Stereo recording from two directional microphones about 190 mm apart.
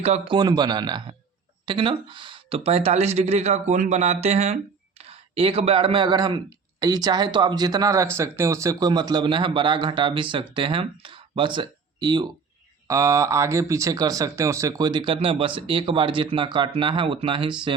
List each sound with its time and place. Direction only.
0.0 s speech: 35° right (ahead or behind)
0.3 s speech: 20° right (ahead or behind)